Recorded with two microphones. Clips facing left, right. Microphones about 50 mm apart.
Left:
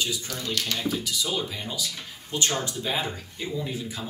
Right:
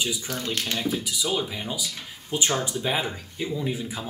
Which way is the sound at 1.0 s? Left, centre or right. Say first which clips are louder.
Right 2 dB; centre.